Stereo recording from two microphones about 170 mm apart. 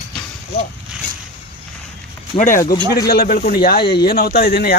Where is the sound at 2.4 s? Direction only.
55° left (ahead or behind).